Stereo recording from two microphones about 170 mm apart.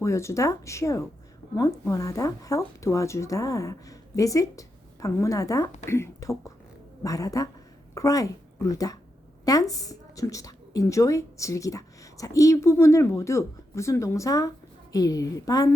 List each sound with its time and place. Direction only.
0.0 s a woman's voice: 15° left (ahead or behind)